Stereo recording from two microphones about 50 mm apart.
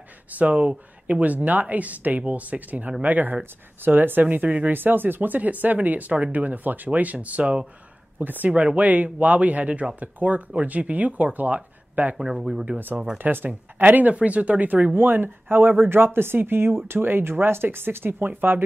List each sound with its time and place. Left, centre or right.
0.3 s speech: right
8.2 s speech: right
8.5 s speech: right
12.2 s speech: centre
13.2 s speech: right
15.0 s speech: right